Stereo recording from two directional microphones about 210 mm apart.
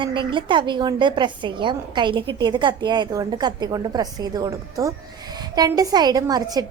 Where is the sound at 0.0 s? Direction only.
25° right (ahead or behind).